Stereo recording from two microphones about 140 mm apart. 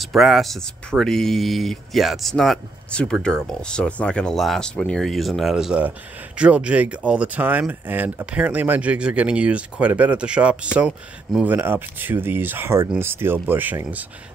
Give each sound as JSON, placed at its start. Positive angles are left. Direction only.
{"t": 0.0, "sound": "speech", "side_deg": 0}